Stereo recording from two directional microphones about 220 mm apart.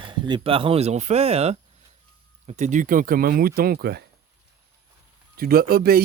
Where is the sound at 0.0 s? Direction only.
20° right (ahead or behind); by 4.0 s 45° right (ahead or behind).